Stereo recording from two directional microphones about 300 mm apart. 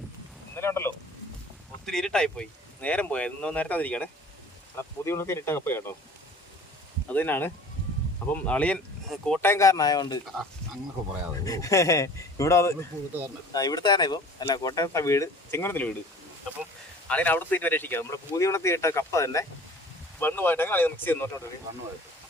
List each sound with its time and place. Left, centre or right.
0.5 s speech: centre
7.1 s speech: centre
11.4 s speech: centre
17.1 s speech: centre